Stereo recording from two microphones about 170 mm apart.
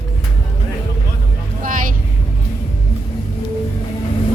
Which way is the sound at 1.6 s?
55° right (ahead or behind).